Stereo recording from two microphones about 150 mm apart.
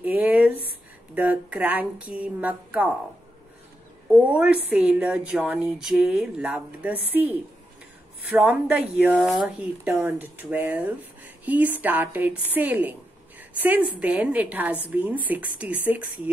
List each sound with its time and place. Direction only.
0.0 s a sound: 10° right (ahead or behind)
1.1 s a woman's voice: 10° right (ahead or behind)
4.1 s a woman's voice: 5° right (ahead or behind)